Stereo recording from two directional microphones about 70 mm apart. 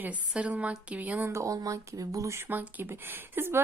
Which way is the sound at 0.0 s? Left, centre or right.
Centre.